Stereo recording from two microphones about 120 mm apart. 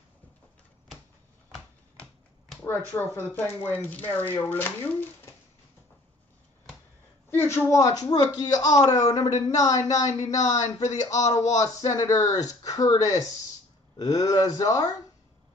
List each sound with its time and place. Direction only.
2.7 s speech: 15° left (ahead or behind)
7.2 s a man's voice: 20° left (ahead or behind)